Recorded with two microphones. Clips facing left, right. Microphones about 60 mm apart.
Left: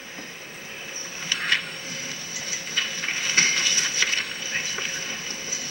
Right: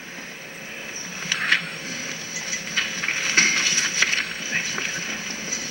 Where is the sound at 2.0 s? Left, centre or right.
Right.